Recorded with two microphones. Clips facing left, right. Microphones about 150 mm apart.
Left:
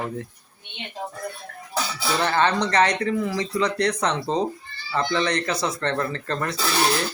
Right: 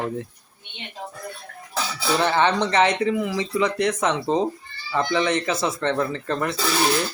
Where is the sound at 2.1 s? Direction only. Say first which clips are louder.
Right 2 dB; 15° right (ahead or behind).